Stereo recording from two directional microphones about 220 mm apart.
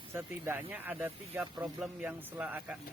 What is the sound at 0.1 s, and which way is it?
Speech, 10° right (ahead or behind).